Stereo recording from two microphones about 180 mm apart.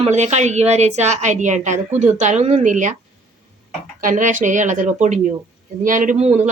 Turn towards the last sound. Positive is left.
turn(degrees=-40)  # may be behind; listen again after turning